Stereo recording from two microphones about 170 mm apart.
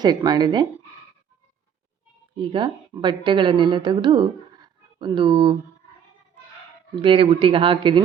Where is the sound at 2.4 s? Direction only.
30° right (ahead or behind).